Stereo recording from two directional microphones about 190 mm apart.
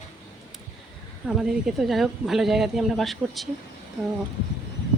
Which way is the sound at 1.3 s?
5° right (ahead or behind).